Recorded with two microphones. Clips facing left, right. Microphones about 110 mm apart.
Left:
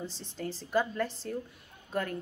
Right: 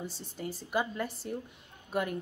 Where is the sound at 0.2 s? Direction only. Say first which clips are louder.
Left 1 dB; 10° right (ahead or behind).